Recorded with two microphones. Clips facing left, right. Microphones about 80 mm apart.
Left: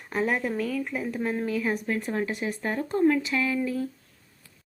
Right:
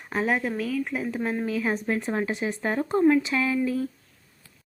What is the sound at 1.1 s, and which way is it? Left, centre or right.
Speech, centre.